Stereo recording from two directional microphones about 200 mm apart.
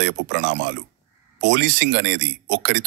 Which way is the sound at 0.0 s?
60° right (ahead or behind).